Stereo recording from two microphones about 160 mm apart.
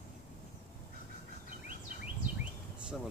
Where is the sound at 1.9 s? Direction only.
60° right (ahead or behind).